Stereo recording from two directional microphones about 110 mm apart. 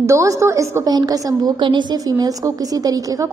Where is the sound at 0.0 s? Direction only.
30° right (ahead or behind).